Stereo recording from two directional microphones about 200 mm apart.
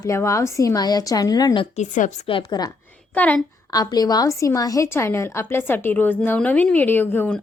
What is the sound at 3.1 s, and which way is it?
Speech, 5° left (ahead or behind).